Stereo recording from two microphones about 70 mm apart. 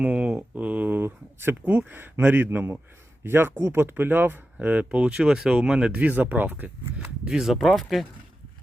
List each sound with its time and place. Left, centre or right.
0.0 s a sound: centre; by 1.5 s right
1.6 s speech: right
6.0 s speech: right
7.3 s speech: centre